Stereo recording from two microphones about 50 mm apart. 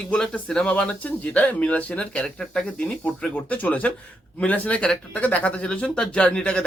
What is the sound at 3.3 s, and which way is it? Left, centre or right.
Speech, left.